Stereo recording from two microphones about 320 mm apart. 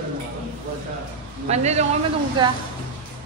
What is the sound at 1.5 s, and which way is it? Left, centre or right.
A man's voice, centre.